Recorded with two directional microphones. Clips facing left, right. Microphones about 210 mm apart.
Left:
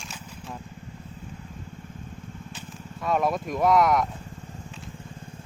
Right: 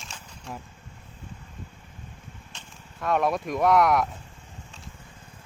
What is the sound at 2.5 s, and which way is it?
Speech, centre (ahead or behind).